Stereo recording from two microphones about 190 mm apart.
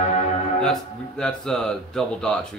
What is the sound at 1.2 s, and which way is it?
Speech, 5° left (ahead or behind).